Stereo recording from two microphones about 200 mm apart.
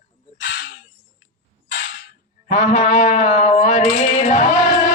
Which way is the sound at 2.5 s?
40° left (ahead or behind).